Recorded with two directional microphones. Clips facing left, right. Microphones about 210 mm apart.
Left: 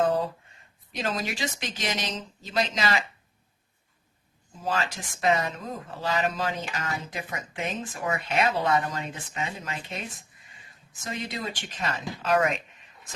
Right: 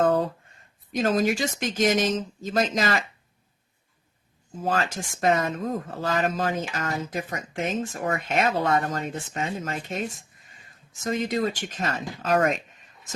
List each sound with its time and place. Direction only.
0.9 s speech: 45° right (ahead or behind)
4.6 s speech: 50° right (ahead or behind)